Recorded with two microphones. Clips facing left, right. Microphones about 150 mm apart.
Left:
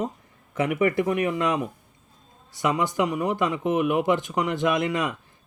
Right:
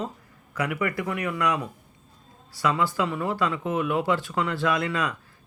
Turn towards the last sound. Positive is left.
turn(degrees=20)  # may be behind; listen again after turning